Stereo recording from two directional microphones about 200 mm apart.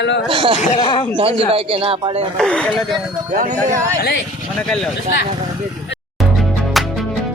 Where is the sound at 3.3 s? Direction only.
45° right (ahead or behind).